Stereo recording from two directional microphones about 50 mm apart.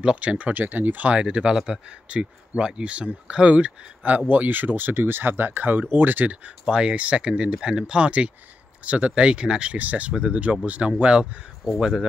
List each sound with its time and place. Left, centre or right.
0.0 s speech: right
6.4 s speech: centre